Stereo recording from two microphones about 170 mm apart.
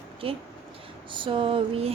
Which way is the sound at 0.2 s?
35° right (ahead or behind).